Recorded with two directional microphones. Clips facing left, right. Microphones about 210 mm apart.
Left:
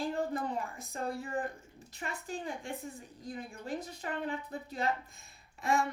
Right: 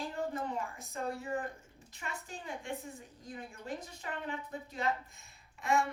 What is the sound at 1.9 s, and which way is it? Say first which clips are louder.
A woman's voice: left 5 dB; 35° left (ahead or behind).